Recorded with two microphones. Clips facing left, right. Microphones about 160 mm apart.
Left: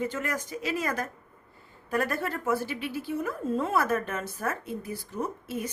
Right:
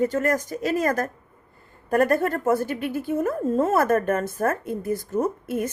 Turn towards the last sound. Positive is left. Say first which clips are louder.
# right 8 dB
turn(degrees=-50)  # may be behind; listen again after turning